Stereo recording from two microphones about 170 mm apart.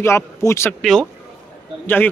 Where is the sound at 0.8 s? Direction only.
5° left (ahead or behind).